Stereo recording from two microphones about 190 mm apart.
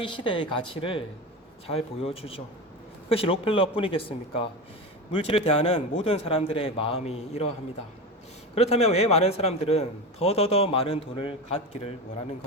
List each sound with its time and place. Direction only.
0.0 s a man's voice: 25° left (ahead or behind)
8.5 s a man's voice: 35° left (ahead or behind)